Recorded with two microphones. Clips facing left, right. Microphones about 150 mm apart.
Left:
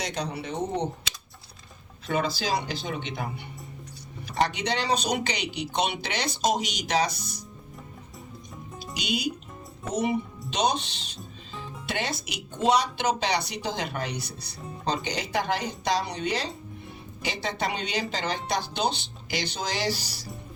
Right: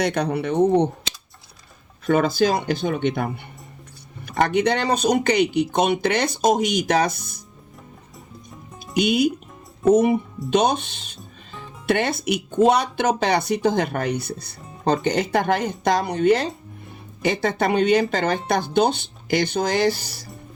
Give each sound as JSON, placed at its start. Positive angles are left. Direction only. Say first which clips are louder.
{"t": 0.0, "sound": "speech", "louder": "right 10 dB", "side_deg": -60}
{"t": 2.0, "sound": "speech", "louder": "right 9 dB", "side_deg": -55}
{"t": 9.0, "sound": "speech", "louder": "right 11 dB", "side_deg": -55}